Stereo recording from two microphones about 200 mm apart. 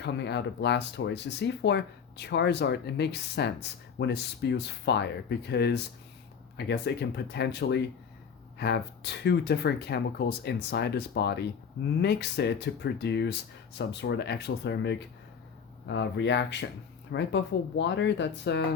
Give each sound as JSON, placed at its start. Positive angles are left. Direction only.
{"t": 0.0, "sound": "speech", "side_deg": 60}